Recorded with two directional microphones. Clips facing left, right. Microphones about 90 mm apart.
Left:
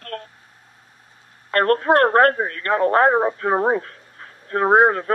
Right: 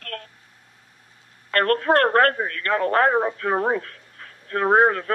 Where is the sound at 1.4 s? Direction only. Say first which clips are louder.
Left 3 dB; 25° left (ahead or behind).